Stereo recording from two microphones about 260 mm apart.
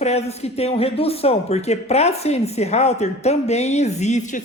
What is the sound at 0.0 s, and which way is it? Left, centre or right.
Speech, left.